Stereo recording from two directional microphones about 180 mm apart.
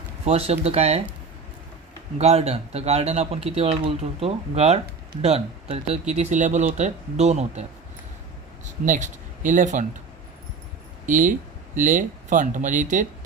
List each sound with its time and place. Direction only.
0.3 s speech: 35° right (ahead or behind)
2.1 s speech: 35° right (ahead or behind)
8.6 s speech: 45° right (ahead or behind)
11.0 s speech: 45° right (ahead or behind)